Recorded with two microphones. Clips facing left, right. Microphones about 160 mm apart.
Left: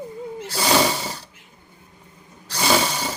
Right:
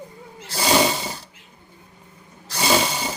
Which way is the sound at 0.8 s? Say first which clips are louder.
Even; 15° right (ahead or behind).